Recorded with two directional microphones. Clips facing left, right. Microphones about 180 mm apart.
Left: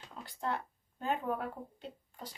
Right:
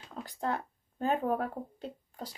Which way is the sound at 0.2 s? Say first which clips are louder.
Right 3 dB; 40° right (ahead or behind).